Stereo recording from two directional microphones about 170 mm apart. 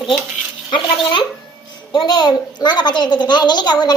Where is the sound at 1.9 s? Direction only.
25° left (ahead or behind).